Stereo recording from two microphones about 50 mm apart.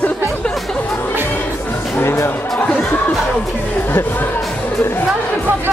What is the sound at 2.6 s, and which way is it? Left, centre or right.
Chatter, left.